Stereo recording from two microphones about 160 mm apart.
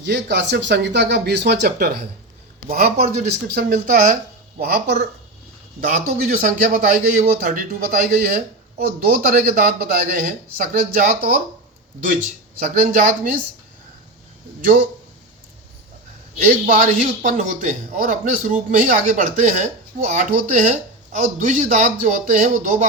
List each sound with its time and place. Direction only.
0.0 s speech: 90° right
2.6 s speech: 65° right (ahead or behind)
5.8 s a man's voice: 60° right (ahead or behind)
12.5 s a man's voice: 60° right (ahead or behind)
16.5 s a man's voice: 55° right (ahead or behind)